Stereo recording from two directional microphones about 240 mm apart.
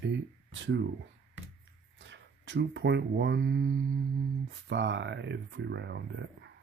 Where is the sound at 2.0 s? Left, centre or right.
Right.